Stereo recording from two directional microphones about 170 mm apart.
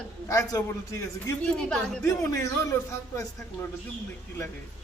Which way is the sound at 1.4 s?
5° left (ahead or behind).